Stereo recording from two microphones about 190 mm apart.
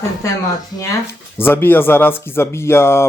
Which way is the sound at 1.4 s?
10° left (ahead or behind).